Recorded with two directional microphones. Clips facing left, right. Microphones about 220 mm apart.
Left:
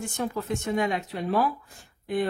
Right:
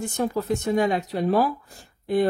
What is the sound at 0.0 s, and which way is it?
Speech, 40° right (ahead or behind).